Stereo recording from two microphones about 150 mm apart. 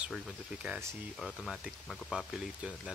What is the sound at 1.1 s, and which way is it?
Speech, centre (ahead or behind).